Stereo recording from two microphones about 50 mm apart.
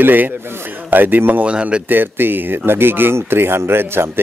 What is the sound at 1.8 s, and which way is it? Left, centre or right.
Speech, right.